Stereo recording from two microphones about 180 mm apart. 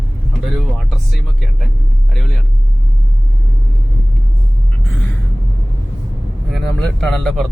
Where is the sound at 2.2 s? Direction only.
5° left (ahead or behind).